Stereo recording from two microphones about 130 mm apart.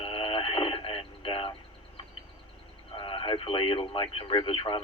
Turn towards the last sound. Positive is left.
turn(degrees=40)  # may be behind; listen again after turning